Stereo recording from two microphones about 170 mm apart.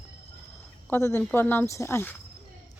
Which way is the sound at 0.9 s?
15° left (ahead or behind).